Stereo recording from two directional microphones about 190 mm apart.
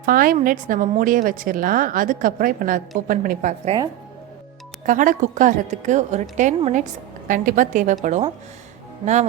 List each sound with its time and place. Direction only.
0.0 s a woman's voice: 45° right (ahead or behind)
4.9 s a woman's voice: 45° right (ahead or behind)